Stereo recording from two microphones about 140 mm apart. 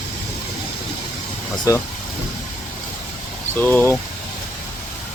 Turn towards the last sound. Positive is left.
turn(degrees=15)  # may be behind; listen again after turning